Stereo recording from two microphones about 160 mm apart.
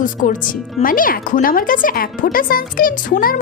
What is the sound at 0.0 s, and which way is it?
Speech, 55° left (ahead or behind).